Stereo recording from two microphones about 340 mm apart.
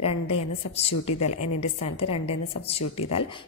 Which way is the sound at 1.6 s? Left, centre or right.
Centre.